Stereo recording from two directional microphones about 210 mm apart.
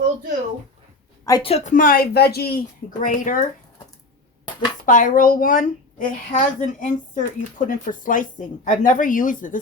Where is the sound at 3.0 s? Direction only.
40° left (ahead or behind).